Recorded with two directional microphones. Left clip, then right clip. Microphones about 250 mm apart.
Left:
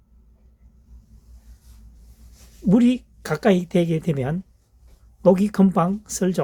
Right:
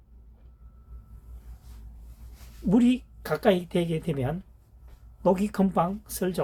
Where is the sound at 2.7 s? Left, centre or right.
Left.